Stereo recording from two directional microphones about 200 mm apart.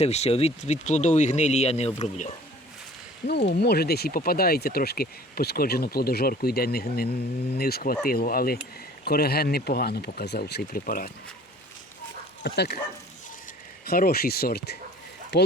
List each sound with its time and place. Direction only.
0.0 s speech: 30° left (ahead or behind)
3.2 s speech: 55° left (ahead or behind)
12.4 s speech: 55° left (ahead or behind)
13.8 s speech: 50° left (ahead or behind)